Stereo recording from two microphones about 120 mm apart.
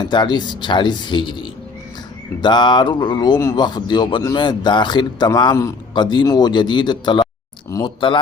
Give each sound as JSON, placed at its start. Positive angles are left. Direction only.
{"t": 0.0, "sound": "a man's voice", "side_deg": 40}